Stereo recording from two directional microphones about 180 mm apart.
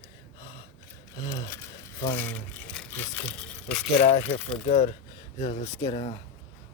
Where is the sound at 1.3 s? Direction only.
15° left (ahead or behind).